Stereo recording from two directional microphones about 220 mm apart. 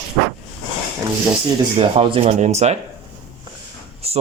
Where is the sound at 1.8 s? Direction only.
25° right (ahead or behind).